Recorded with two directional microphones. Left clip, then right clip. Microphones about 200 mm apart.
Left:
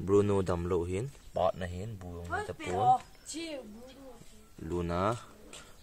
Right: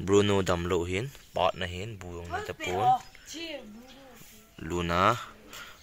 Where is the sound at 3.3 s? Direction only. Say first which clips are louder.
Right 2 dB; 55° left (ahead or behind).